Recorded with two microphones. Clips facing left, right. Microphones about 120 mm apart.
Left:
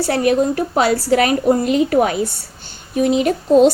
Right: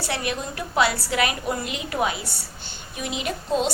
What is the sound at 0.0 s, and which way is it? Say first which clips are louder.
A woman's voice: left 13 dB; 40° left (ahead or behind).